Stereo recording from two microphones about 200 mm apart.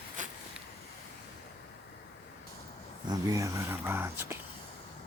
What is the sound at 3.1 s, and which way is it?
Speech, 15° right (ahead or behind).